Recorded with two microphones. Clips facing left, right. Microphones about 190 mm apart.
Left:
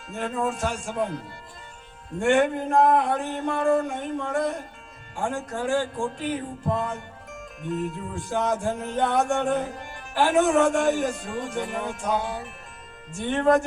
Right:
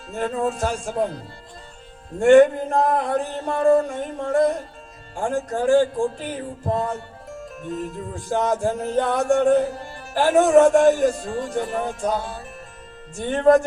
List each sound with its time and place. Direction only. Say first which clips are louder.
0.1 s music: right 4 dB; 40° right (ahead or behind)
12.1 s music: even; 20° left (ahead or behind)
13.1 s music: right 5 dB; 40° right (ahead or behind)